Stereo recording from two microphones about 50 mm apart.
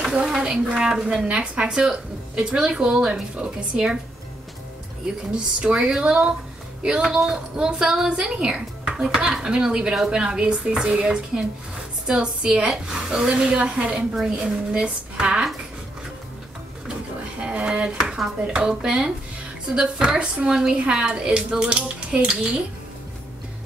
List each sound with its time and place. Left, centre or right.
0.2 s speech: centre
5.3 s a woman's voice: right
9.1 s a woman's voice: centre
17.4 s a woman's voice: right